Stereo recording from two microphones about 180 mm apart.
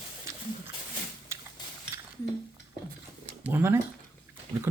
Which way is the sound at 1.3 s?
15° right (ahead or behind).